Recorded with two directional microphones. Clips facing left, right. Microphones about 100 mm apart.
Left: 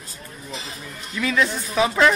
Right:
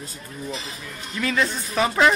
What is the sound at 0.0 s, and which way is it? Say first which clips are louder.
A man's voice: right 5 dB; centre (ahead or behind).